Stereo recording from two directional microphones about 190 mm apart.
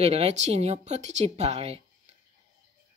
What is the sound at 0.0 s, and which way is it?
A woman's voice, 30° right (ahead or behind).